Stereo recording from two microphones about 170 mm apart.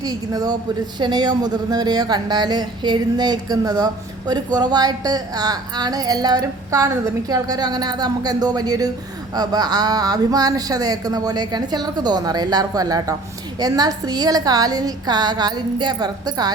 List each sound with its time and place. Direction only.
0.0 s a woman's voice: 25° right (ahead or behind)